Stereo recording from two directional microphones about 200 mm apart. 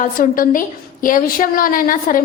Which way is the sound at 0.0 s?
45° left (ahead or behind).